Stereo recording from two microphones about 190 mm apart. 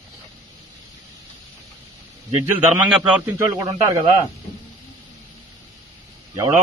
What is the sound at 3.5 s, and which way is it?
Speech, 20° right (ahead or behind).